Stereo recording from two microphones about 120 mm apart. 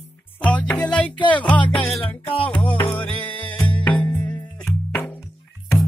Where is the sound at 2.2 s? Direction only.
50° left (ahead or behind).